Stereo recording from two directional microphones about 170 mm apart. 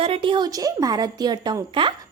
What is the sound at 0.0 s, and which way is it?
Speech, 30° right (ahead or behind).